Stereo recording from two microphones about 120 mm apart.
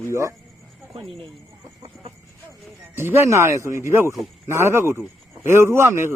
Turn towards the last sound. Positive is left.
turn(degrees=-20)  # may be behind; listen again after turning